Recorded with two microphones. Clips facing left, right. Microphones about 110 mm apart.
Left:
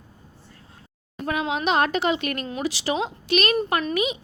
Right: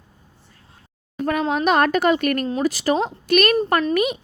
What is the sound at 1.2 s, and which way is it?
A woman's voice, 45° right (ahead or behind).